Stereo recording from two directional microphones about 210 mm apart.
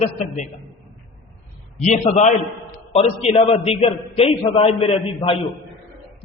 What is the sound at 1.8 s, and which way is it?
Speech, 35° left (ahead or behind).